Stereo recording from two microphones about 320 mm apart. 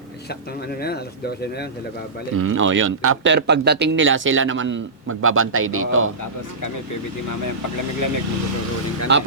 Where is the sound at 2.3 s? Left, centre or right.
Right.